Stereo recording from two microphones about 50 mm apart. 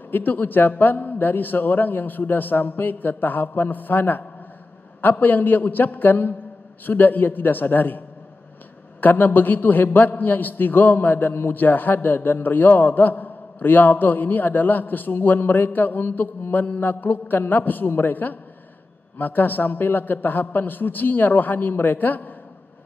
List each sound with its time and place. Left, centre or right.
0.1 s a man's voice: left
9.0 s a man's voice: left